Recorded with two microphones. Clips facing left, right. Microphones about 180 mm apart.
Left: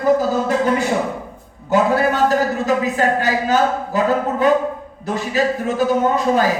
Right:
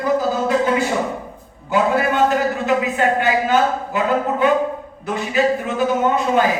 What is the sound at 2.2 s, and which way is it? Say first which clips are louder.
A man's voice: left 1 dB; 35° left (ahead or behind).